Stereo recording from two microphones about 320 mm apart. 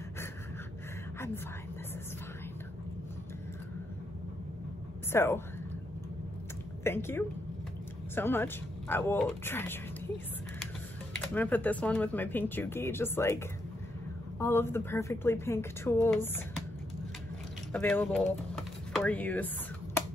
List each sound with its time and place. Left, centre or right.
5.1 s speech: centre
6.8 s speech: centre
11.1 s speech: centre
17.7 s speech: centre